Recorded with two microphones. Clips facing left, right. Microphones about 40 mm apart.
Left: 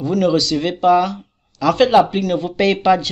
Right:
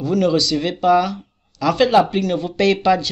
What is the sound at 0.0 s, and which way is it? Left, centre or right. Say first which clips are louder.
Speech: left 1 dB; centre.